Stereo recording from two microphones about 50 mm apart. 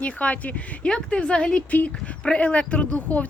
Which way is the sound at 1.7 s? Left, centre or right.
Left.